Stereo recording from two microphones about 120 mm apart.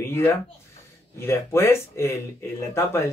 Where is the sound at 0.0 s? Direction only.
20° left (ahead or behind).